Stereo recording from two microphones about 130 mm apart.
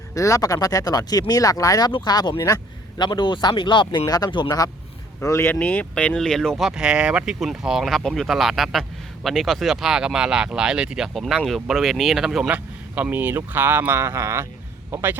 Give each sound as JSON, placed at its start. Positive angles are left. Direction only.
{"t": 0.1, "sound": "a man's voice", "side_deg": 25}